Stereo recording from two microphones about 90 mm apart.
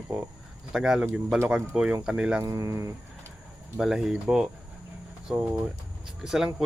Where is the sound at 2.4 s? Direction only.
35° right (ahead or behind).